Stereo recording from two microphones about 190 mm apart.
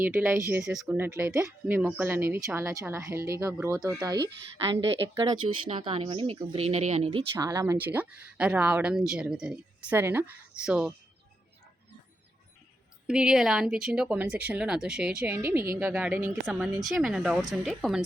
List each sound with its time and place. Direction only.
0.0 s speech: 15° right (ahead or behind); by 7.3 s 30° right (ahead or behind)
7.3 s speech: 20° right (ahead or behind); by 10.9 s 5° right (ahead or behind)
13.1 s speech: 5° right (ahead or behind)